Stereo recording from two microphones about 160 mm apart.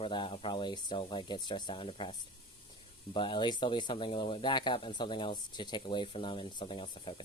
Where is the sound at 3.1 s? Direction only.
30° left (ahead or behind).